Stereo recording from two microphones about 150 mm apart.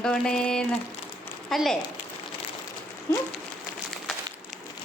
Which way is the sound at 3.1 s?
20° left (ahead or behind).